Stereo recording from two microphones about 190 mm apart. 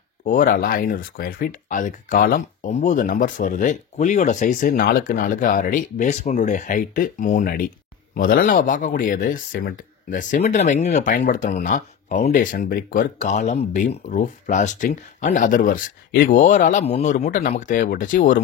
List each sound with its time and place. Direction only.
0.2 s speech: 45° left (ahead or behind)